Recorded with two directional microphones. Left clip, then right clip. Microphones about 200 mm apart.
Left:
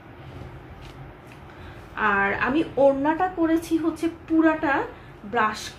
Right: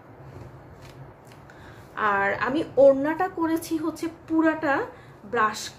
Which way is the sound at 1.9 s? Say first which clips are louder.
Left 1 dB; 5° right (ahead or behind).